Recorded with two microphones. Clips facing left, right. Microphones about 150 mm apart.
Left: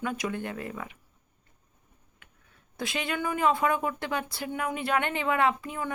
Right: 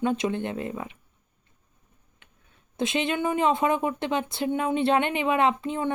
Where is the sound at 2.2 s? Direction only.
25° right (ahead or behind).